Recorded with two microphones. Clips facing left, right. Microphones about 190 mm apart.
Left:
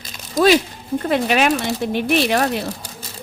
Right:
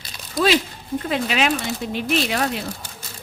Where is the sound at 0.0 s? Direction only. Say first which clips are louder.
Left 5 dB; 45° left (ahead or behind).